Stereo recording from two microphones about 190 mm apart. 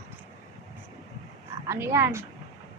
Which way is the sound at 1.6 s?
15° right (ahead or behind).